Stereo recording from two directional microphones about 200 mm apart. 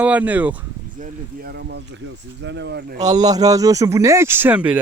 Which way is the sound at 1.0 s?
50° right (ahead or behind).